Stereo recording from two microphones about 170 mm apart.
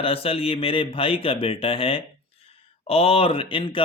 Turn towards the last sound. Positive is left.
turn(degrees=30)  # may be behind; listen again after turning